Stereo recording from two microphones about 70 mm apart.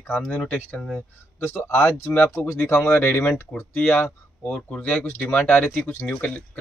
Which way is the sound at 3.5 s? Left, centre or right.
Centre.